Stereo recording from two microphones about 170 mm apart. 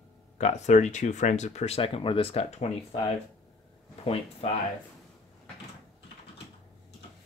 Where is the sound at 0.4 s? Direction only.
40° left (ahead or behind).